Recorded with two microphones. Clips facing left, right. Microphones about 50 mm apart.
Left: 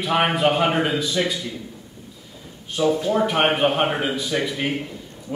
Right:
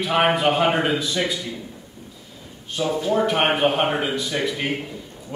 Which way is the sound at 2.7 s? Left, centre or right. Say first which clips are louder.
Left 2 dB; centre.